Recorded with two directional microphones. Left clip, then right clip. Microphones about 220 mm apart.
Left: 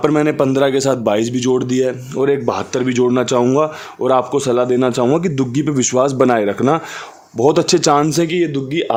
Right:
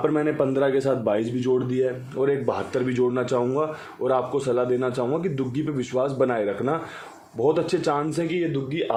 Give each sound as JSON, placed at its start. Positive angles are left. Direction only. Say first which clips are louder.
{"t": 0.0, "sound": "a man's voice", "louder": "left 8 dB", "side_deg": 45}